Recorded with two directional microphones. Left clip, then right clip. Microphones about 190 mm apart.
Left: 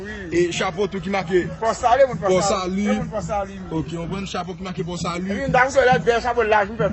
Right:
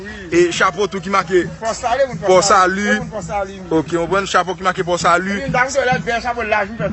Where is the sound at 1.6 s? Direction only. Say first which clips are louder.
Left 1 dB; 25° left (ahead or behind).